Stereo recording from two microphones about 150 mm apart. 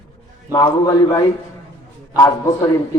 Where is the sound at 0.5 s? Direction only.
25° left (ahead or behind).